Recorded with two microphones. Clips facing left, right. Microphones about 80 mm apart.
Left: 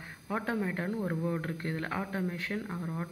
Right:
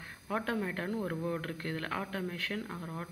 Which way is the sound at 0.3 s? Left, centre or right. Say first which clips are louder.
Left 1 dB; centre.